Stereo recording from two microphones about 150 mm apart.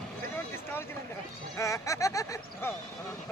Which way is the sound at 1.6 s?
20° left (ahead or behind).